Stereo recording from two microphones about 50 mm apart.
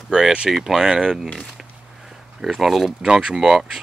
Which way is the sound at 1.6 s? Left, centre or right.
Centre.